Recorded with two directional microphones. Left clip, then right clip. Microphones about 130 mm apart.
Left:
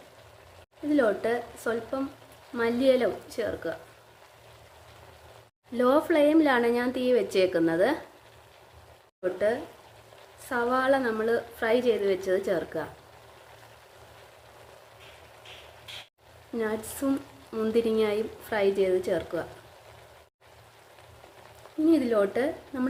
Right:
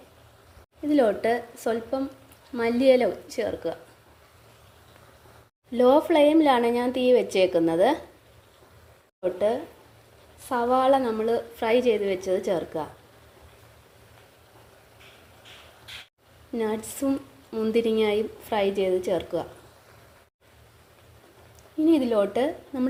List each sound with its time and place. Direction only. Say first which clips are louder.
0.9 s a woman's voice: right 3 dB; 20° right (ahead or behind)
5.7 s a woman's voice: right 4 dB; 10° right (ahead or behind)
10.5 s a woman's voice: right 4 dB; 10° right (ahead or behind)
16.6 s a woman's voice: right 2 dB; 15° right (ahead or behind)
17.1 s a woman's voice: right 1 dB; 5° right (ahead or behind)
21.8 s a woman's voice: right 2 dB; 10° right (ahead or behind)